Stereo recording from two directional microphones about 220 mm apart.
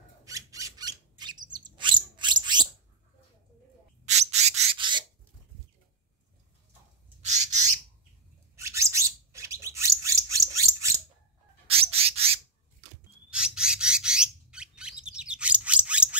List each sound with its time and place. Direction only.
0.2 s a sound: 15° right (ahead or behind)
4.0 s rub: 30° right (ahead or behind)
7.2 s bird: 30° right (ahead or behind)
8.5 s bird: 15° right (ahead or behind)
11.6 s bird: 25° right (ahead or behind)
13.3 s bird: 5° right (ahead or behind)